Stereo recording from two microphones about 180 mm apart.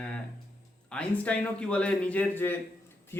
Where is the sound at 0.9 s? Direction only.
5° left (ahead or behind).